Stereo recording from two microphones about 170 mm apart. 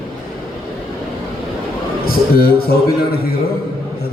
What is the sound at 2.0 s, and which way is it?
Speech, 60° left (ahead or behind).